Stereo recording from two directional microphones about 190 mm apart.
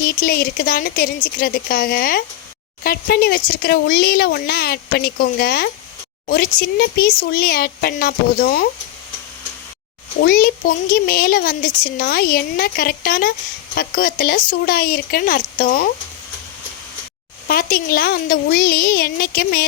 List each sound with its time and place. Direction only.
0.2 s speech: 50° left (ahead or behind)
10.2 s speech: 50° left (ahead or behind)
17.5 s speech: 50° left (ahead or behind)